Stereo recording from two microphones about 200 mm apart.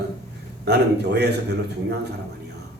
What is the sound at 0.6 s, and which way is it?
Speech, 55° right (ahead or behind).